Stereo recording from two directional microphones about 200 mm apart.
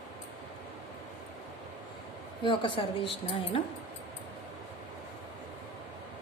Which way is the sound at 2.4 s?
25° left (ahead or behind).